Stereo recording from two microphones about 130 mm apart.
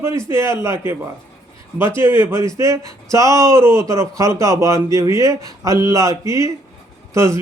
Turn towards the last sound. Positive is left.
turn(degrees=-20)  # may be behind; listen again after turning